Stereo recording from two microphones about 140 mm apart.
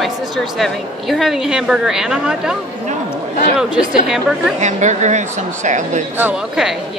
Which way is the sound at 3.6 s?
5° right (ahead or behind).